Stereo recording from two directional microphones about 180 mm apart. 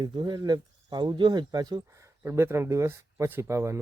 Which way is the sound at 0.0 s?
25° right (ahead or behind).